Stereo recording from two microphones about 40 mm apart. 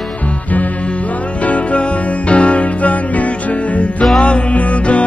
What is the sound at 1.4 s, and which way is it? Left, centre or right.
Music, left.